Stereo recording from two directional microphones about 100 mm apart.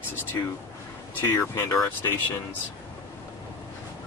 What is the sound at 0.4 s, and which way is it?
Speech, 30° left (ahead or behind).